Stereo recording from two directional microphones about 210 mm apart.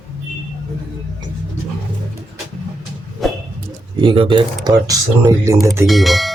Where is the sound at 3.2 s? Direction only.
Centre (ahead or behind).